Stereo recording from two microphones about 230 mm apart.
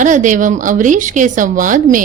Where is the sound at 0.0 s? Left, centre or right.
Right.